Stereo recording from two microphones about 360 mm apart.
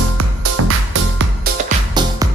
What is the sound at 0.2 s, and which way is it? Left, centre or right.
Music, right.